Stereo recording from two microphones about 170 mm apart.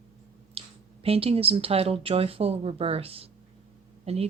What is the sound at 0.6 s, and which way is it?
Speech, 35° right (ahead or behind).